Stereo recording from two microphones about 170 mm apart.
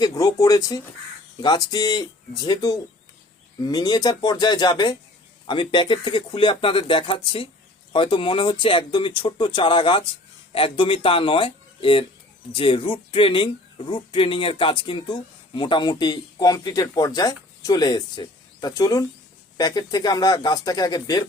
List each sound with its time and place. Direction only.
0.0 s speech: 20° left (ahead or behind)